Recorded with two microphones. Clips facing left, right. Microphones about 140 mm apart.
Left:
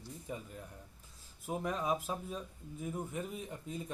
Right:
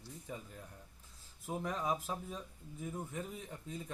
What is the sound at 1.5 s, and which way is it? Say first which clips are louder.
Speech: left 2 dB; 15° left (ahead or behind).